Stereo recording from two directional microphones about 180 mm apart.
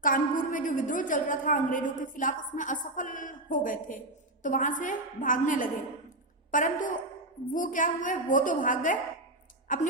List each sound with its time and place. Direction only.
0.0 s a woman's voice: 50° left (ahead or behind)